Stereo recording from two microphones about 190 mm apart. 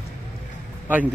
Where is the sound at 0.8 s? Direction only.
10° right (ahead or behind).